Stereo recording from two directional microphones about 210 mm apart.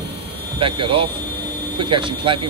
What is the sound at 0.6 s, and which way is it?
Speech, 25° right (ahead or behind).